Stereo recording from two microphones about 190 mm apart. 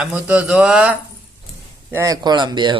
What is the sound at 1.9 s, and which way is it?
Speech, 15° right (ahead or behind).